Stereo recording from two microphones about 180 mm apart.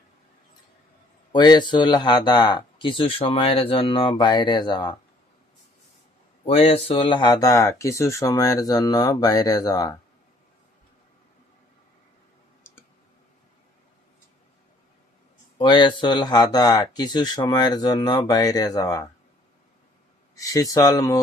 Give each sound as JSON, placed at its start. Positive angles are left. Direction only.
{"t": 1.3, "sound": "speech", "side_deg": 25}
{"t": 6.4, "sound": "speech", "side_deg": 35}
{"t": 15.5, "sound": "speech", "side_deg": 25}
{"t": 20.3, "sound": "speech", "side_deg": 20}